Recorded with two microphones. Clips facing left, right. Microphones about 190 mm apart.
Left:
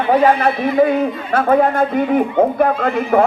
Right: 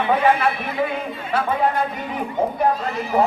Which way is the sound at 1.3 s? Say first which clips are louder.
Left 6 dB; 50° left (ahead or behind).